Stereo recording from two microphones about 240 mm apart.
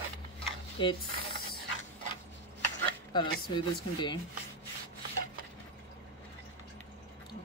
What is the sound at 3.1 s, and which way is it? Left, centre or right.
Speech, centre.